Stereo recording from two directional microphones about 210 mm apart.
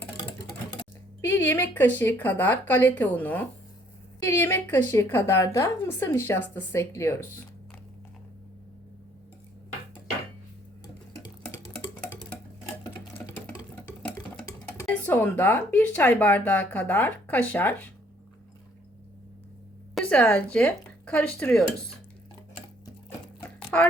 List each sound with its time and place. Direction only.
0.8 s speech: 10° left (ahead or behind)
13.1 s a sound: 15° left (ahead or behind)
14.4 s speech: 10° left (ahead or behind)
20.0 s speech: 5° left (ahead or behind)
23.7 s speech: 10° left (ahead or behind)